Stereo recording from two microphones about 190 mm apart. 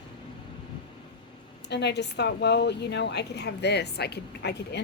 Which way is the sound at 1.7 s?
65° left (ahead or behind).